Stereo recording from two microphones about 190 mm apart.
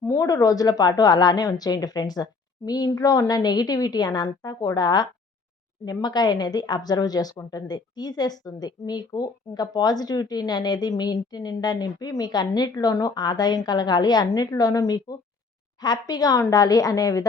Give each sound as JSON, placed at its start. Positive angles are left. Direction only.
{"t": 0.0, "sound": "a woman's voice", "side_deg": 15}